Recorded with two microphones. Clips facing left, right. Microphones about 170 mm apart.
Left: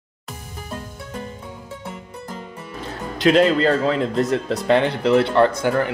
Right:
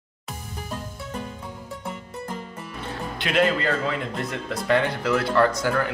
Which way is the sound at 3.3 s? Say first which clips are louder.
Left 7 dB; 30° left (ahead or behind).